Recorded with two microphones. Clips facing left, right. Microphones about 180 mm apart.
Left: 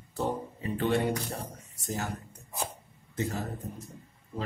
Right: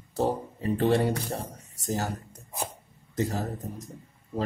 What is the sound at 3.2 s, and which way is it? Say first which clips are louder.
Speech: right 4 dB; 40° right (ahead or behind).